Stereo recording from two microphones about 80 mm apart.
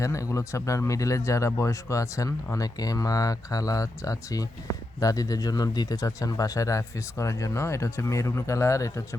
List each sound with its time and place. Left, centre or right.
0.0 s speech: left